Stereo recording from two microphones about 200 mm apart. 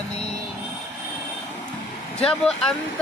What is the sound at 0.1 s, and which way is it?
Vehicle, 30° left (ahead or behind).